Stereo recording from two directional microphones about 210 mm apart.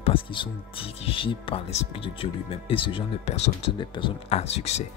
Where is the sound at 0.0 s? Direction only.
25° left (ahead or behind).